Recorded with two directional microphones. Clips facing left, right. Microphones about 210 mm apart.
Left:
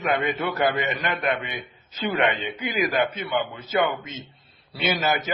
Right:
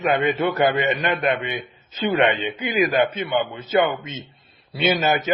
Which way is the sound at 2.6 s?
25° right (ahead or behind).